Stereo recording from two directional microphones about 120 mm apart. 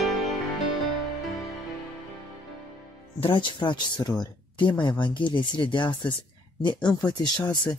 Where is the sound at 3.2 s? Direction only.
45° left (ahead or behind).